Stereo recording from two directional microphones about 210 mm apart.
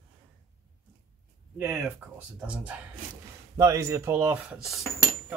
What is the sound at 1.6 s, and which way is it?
Speech, 5° right (ahead or behind).